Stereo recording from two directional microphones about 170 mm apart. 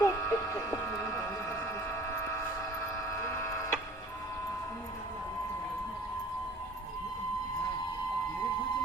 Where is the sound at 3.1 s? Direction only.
15° left (ahead or behind).